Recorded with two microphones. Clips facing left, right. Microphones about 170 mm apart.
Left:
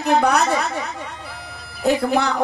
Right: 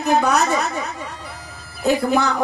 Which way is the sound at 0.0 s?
60° left (ahead or behind).